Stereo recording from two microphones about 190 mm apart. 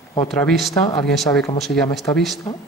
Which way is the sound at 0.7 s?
20° left (ahead or behind).